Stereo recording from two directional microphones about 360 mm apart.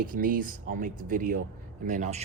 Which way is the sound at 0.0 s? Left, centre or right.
Right.